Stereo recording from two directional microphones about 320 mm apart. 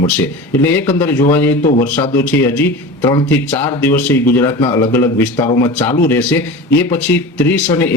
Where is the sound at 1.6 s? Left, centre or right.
Left.